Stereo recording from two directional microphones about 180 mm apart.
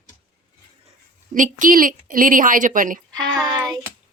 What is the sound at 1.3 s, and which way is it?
A woman's voice, 45° right (ahead or behind).